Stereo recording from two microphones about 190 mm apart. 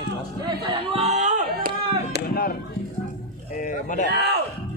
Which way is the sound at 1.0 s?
35° right (ahead or behind).